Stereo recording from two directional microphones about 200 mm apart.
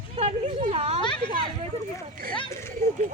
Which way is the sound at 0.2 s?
30° right (ahead or behind).